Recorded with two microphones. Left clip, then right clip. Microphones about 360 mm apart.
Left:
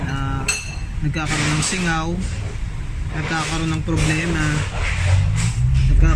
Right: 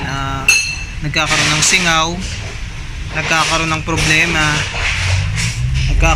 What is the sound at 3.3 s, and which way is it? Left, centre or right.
Speech, centre.